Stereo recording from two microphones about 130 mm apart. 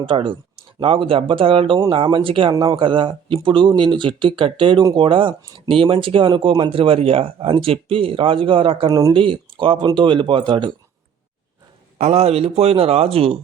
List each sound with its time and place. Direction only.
0.0 s speech: 40° right (ahead or behind)
8.9 s speech: 25° right (ahead or behind)
9.1 s speech: 40° right (ahead or behind)
11.9 s speech: 55° right (ahead or behind)